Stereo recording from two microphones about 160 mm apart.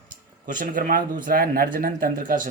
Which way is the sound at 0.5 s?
60° right (ahead or behind).